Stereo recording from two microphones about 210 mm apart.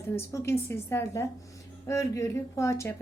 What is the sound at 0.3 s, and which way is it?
A woman's voice, 10° left (ahead or behind).